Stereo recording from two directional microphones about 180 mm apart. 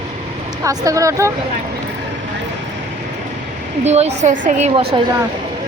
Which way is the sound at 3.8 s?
40° right (ahead or behind).